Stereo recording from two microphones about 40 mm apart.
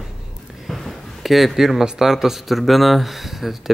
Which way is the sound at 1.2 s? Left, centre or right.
Centre.